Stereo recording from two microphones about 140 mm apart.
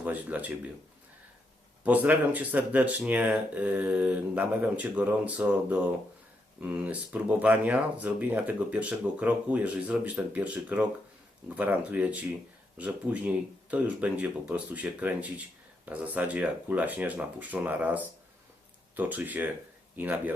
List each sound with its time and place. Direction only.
0.0 s speech: 10° right (ahead or behind)
1.8 s speech: 10° right (ahead or behind)